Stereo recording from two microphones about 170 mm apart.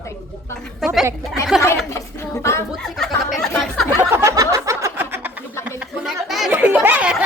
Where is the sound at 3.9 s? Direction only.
15° right (ahead or behind).